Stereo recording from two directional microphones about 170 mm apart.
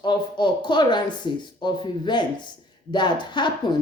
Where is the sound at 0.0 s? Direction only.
25° left (ahead or behind).